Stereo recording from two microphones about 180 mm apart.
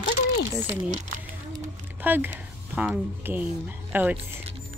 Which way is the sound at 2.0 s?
10° right (ahead or behind).